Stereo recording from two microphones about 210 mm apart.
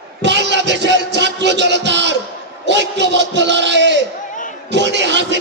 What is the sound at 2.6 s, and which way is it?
A man's voice, 55° right (ahead or behind).